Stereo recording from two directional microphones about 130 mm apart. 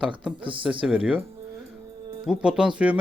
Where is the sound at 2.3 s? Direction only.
5° right (ahead or behind).